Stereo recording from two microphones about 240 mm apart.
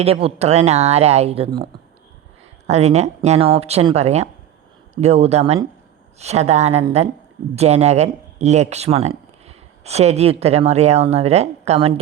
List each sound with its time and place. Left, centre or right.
0.0 s speech: right
2.6 s speech: right